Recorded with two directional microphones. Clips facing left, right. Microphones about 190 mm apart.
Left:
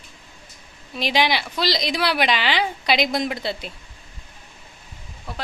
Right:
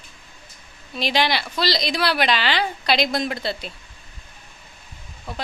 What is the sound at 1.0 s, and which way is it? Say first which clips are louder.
A woman's voice: left 1 dB; 15° left (ahead or behind).